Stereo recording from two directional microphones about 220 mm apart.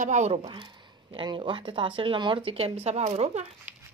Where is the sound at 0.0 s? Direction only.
30° right (ahead or behind).